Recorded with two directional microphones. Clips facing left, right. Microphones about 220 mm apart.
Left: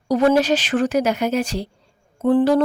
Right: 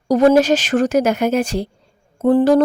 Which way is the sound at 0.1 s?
45° right (ahead or behind).